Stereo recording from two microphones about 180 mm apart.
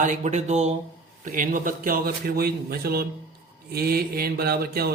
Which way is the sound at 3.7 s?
60° right (ahead or behind).